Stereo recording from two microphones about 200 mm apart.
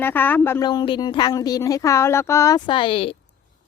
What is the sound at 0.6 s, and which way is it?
Speech, 25° left (ahead or behind).